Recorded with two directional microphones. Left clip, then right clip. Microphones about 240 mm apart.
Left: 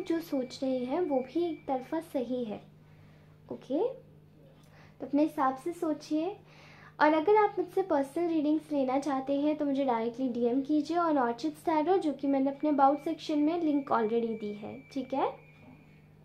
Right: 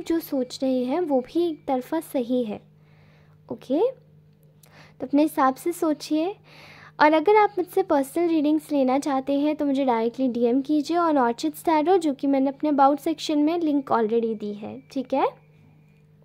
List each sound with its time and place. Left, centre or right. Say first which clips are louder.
0.0 s speech: right 7 dB; right